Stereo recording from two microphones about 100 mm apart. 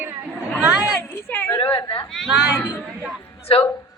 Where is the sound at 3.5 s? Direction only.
75° left (ahead or behind).